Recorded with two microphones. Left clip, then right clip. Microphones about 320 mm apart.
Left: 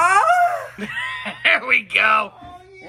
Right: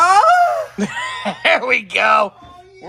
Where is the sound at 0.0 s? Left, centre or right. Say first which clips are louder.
Right 4 dB; right.